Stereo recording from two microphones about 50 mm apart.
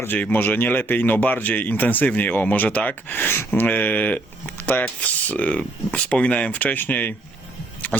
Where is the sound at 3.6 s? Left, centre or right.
Left.